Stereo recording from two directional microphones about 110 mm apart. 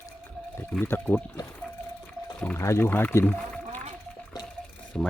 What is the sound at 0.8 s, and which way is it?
Speech, 15° left (ahead or behind).